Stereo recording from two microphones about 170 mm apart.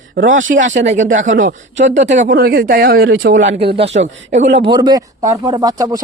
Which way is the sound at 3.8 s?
40° right (ahead or behind).